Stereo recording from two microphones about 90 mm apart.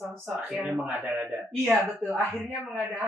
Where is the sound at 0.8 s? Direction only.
10° right (ahead or behind).